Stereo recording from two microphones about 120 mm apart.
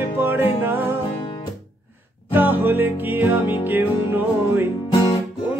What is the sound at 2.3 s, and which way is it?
Music, 15° right (ahead or behind).